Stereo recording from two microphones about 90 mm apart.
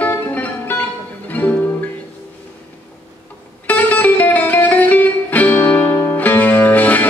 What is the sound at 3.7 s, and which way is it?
Music, 20° left (ahead or behind).